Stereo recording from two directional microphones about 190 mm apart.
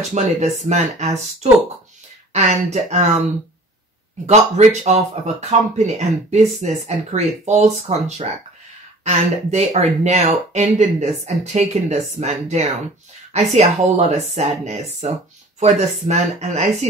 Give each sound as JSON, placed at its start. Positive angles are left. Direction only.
{"t": 0.1, "sound": "speech", "side_deg": -35}
{"t": 4.3, "sound": "speech", "side_deg": -35}